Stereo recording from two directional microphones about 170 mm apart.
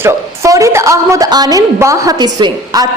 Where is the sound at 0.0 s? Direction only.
20° right (ahead or behind).